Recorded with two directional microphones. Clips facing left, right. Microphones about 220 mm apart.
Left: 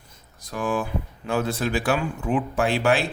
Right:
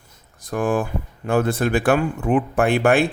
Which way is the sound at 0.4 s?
50° right (ahead or behind).